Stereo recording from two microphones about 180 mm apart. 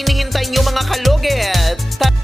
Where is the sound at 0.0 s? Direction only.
Centre (ahead or behind).